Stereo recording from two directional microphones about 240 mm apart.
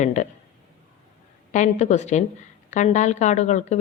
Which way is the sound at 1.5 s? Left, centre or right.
Left.